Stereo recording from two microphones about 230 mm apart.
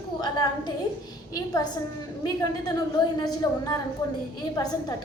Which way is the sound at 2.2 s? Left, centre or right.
Centre.